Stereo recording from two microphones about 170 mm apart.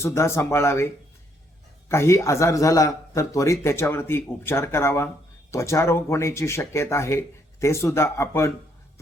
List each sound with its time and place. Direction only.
0.0 s a man's voice: 15° left (ahead or behind)
1.9 s a man's voice: 15° left (ahead or behind)